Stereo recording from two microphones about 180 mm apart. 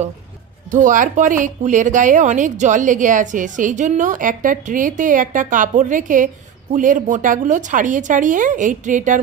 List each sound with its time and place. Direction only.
0.7 s a woman's voice: 45° right (ahead or behind)